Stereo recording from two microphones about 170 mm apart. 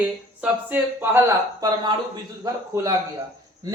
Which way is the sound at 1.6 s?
25° right (ahead or behind).